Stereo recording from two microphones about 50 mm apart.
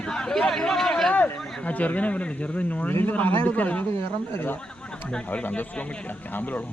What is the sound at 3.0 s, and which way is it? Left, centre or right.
Speech, left.